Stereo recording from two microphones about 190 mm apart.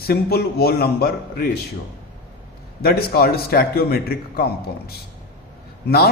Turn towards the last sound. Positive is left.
turn(degrees=55)  # may be behind; listen again after turning